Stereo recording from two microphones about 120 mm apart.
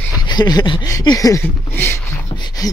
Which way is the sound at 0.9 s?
30° left (ahead or behind).